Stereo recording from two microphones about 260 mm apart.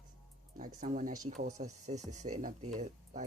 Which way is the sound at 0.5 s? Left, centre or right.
Right.